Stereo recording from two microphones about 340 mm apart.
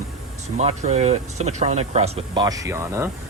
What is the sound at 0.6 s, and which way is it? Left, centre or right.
Speech, centre.